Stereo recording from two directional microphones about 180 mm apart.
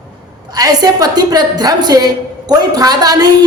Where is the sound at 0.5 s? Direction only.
20° right (ahead or behind).